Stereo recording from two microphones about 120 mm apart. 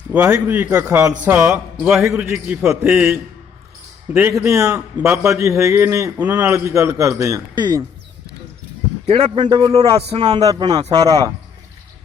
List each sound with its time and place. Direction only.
0.1 s a man's voice: 10° right (ahead or behind)
0.9 s a man's voice: 25° right (ahead or behind)
1.2 s a man's voice: 10° right (ahead or behind)
4.1 s a man's voice: 20° right (ahead or behind)
6.5 s a man's voice: 25° right (ahead or behind)
9.0 s a man's voice: 60° right (ahead or behind)
9.4 s a man's voice: 35° right (ahead or behind)